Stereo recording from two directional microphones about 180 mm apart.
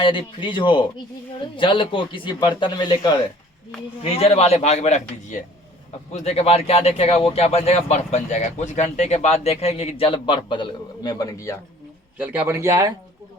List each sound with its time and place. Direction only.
0.0 s speech: 30° left (ahead or behind)
12.1 s speech: 10° right (ahead or behind)